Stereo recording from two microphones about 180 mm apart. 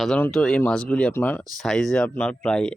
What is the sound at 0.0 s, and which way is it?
Speech, 5° left (ahead or behind).